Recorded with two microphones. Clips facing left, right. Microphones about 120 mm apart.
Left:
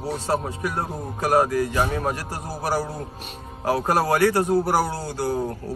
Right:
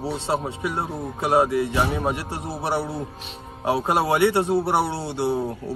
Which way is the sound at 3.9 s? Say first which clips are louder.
Even; 25° right (ahead or behind).